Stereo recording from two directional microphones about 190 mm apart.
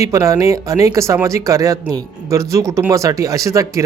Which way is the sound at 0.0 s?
15° right (ahead or behind).